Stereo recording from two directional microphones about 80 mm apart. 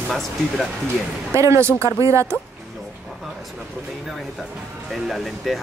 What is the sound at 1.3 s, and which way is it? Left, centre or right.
Speech, right.